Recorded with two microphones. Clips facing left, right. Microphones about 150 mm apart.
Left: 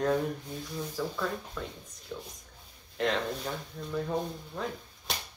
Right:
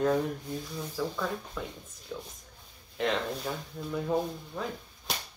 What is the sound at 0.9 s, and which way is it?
Speech, centre (ahead or behind).